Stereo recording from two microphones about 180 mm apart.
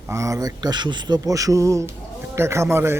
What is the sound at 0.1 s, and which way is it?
A man's voice, 15° right (ahead or behind).